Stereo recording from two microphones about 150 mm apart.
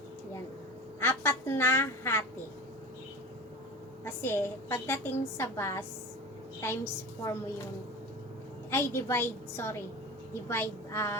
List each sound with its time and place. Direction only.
0.9 s a woman's voice: 15° left (ahead or behind)
4.0 s a woman's voice: 15° left (ahead or behind)
8.7 s a woman's voice: 15° left (ahead or behind)